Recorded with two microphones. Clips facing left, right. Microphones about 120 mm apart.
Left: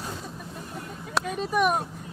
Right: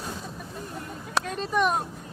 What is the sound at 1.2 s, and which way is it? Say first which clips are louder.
Speech: left 1 dB; 10° left (ahead or behind).